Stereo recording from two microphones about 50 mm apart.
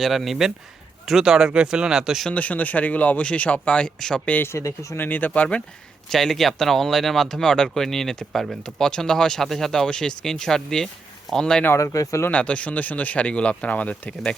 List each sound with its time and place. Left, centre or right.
0.0 s speech: centre
2.3 s speech: left
4.4 s speech: left
4.9 s speech: left
6.1 s speech: centre
11.7 s speech: left
12.3 s speech: left